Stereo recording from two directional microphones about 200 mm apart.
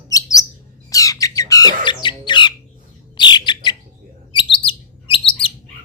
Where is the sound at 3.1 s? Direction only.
20° left (ahead or behind).